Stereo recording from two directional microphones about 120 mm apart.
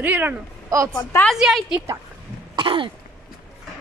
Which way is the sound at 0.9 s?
20° left (ahead or behind).